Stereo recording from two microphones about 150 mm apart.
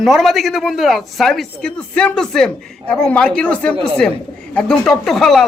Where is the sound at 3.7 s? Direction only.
35° right (ahead or behind).